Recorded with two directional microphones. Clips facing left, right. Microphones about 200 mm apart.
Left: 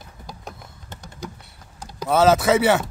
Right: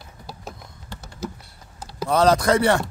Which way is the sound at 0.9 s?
20° left (ahead or behind).